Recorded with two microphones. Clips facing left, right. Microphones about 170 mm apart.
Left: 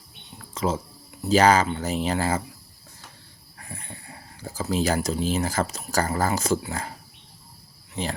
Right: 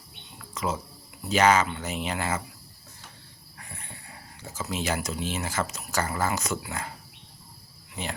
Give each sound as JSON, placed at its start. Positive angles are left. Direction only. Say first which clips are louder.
{"t": 0.5, "sound": "speech", "louder": "left 4 dB", "side_deg": 30}
{"t": 3.6, "sound": "speech", "louder": "left 4 dB", "side_deg": 35}